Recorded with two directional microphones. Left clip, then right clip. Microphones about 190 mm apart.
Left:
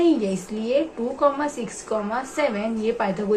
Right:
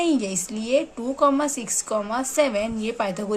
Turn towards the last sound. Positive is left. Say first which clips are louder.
# left 2 dB
turn(degrees=-50)  # may be behind; listen again after turning